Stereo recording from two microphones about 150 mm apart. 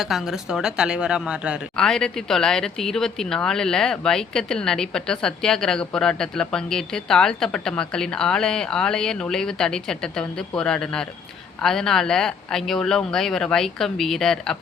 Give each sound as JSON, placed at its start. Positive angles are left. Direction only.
{"t": 0.0, "sound": "speech", "side_deg": 0}